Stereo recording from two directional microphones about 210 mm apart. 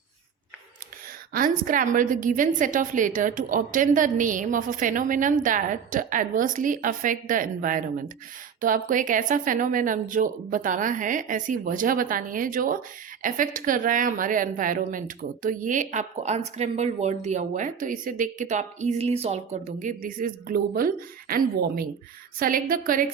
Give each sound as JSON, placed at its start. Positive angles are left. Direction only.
{"t": 1.3, "sound": "a woman's voice", "side_deg": -40}